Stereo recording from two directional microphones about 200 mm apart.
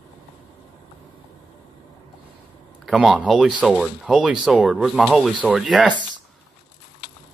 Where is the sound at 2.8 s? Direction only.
Centre (ahead or behind).